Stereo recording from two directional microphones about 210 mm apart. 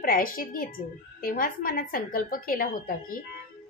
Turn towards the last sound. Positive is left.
turn(degrees=40)  # may be behind; listen again after turning